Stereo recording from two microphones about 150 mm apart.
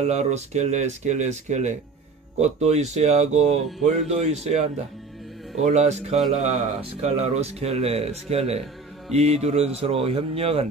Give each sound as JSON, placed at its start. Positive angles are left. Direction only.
{"t": 0.0, "sound": "a man's voice", "side_deg": -45}